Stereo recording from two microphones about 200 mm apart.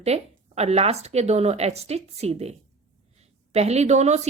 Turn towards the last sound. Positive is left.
turn(degrees=-35)  # may be behind; listen again after turning